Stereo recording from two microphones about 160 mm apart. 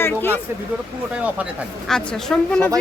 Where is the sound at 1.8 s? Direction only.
5° left (ahead or behind).